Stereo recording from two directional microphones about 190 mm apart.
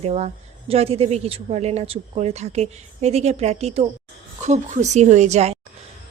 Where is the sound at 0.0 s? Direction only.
35° right (ahead or behind).